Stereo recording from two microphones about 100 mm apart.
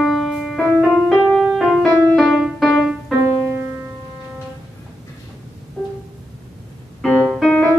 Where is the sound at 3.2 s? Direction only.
25° right (ahead or behind).